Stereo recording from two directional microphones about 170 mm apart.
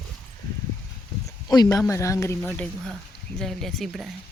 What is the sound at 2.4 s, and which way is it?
Speech, 5° left (ahead or behind).